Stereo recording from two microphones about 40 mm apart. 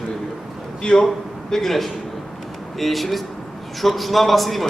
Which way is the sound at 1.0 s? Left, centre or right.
Centre.